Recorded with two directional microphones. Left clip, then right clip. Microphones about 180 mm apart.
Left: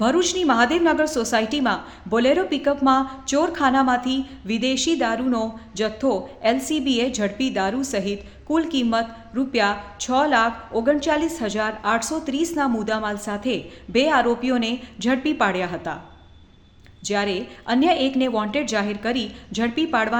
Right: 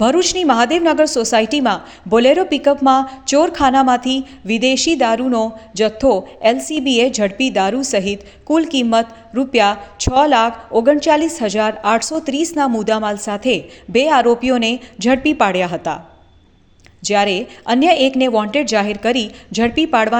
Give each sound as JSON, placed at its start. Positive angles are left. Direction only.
{"t": 0.0, "sound": "a woman's voice", "side_deg": -30}
{"t": 17.0, "sound": "a woman's voice", "side_deg": -35}